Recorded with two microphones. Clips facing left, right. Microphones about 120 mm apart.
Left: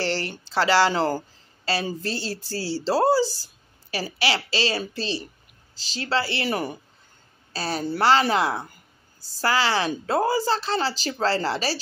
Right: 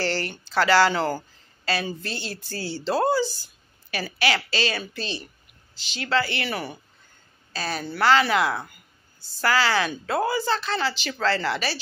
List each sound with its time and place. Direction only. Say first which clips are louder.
0.0 s a woman's voice: even; 25° left (ahead or behind)